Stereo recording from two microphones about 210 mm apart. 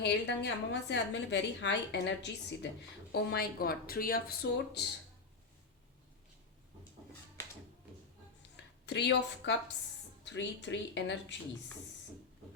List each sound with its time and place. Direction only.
0.0 s a woman's voice: 55° left (ahead or behind)
8.9 s a woman's voice: 55° left (ahead or behind)